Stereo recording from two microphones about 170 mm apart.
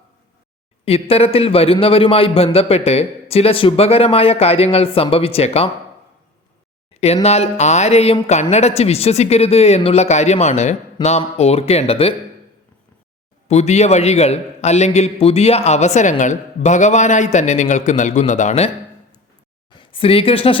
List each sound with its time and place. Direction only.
0.9 s a man's voice: 35° left (ahead or behind)
6.9 s a man's voice: 40° left (ahead or behind)
13.5 s a man's voice: 40° left (ahead or behind)
19.7 s speech: 30° left (ahead or behind)